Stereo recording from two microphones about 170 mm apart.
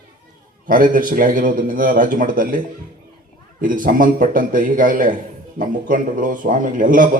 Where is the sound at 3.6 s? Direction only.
55° right (ahead or behind).